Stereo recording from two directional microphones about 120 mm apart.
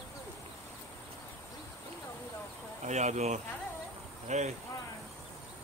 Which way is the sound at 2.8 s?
70° right (ahead or behind).